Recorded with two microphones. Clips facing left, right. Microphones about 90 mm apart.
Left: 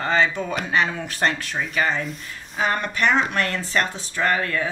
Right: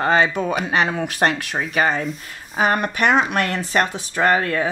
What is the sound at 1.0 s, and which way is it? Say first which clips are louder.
Speech: right 4 dB; 70° right (ahead or behind).